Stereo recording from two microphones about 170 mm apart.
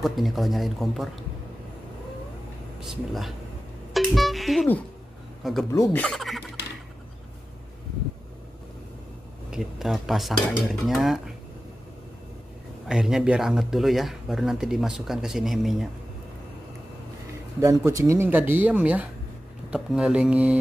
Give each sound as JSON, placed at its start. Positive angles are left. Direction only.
{"t": 0.0, "sound": "speech", "side_deg": 0}
{"t": 2.8, "sound": "speech", "side_deg": 0}
{"t": 3.9, "sound": "music", "side_deg": 0}
{"t": 5.4, "sound": "speech", "side_deg": 0}
{"t": 5.7, "sound": "speech", "side_deg": 15}
{"t": 6.0, "sound": "speech", "side_deg": 0}
{"t": 9.5, "sound": "speech", "side_deg": 0}
{"t": 12.8, "sound": "speech", "side_deg": -5}
{"t": 17.6, "sound": "speech", "side_deg": -15}